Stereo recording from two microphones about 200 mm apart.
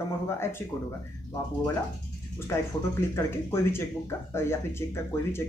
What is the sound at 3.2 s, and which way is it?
Speech, 15° left (ahead or behind).